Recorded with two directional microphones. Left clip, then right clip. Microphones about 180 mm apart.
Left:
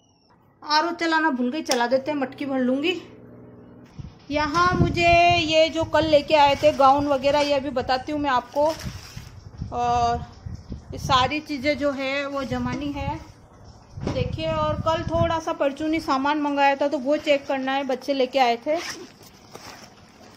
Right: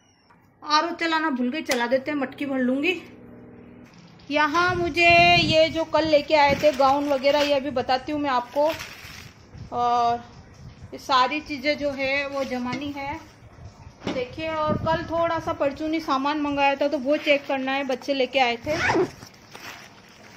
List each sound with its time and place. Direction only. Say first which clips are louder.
0.7 s female singing: left 1 dB; 5° left (ahead or behind)
4.3 s female singing: even; centre (ahead or behind)
11.3 s a woman's voice: left 1 dB; 20° left (ahead or behind)
14.3 s female singing: left 1 dB; centre (ahead or behind)
15.8 s a woman's voice: left 1 dB; 15° left (ahead or behind)